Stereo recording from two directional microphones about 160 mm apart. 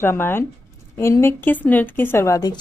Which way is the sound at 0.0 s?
15° left (ahead or behind).